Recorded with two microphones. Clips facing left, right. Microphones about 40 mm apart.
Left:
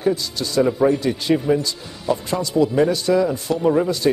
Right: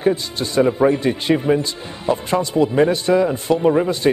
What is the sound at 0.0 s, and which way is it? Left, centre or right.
Speech, right.